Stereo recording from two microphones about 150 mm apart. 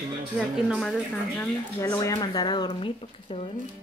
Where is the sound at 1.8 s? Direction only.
20° left (ahead or behind).